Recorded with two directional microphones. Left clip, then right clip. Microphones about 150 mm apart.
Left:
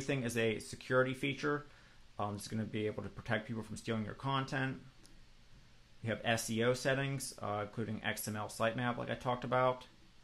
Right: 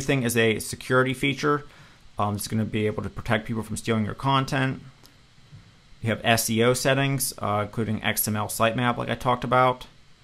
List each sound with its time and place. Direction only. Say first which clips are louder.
0.0 s speech: right 13 dB; 30° right (ahead or behind)
6.0 s speech: right 13 dB; 30° right (ahead or behind)